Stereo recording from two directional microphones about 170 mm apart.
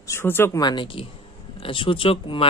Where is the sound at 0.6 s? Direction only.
30° left (ahead or behind).